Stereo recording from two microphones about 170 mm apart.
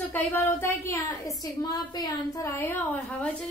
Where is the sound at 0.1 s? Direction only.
10° left (ahead or behind).